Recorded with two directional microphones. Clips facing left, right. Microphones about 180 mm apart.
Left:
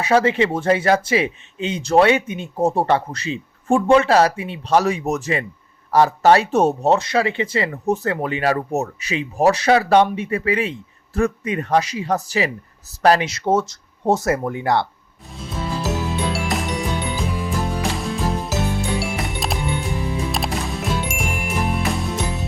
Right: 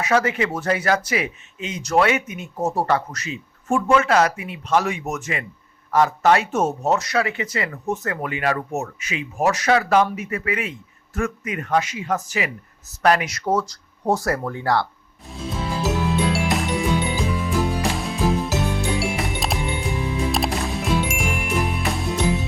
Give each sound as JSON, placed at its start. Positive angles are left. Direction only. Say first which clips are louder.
{"t": 0.0, "sound": "speech", "louder": "left 4 dB", "side_deg": 30}
{"t": 15.3, "sound": "music", "louder": "even", "side_deg": 0}